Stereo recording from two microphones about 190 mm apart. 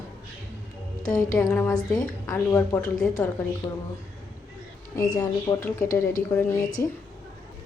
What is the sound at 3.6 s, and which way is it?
Speech, 20° left (ahead or behind).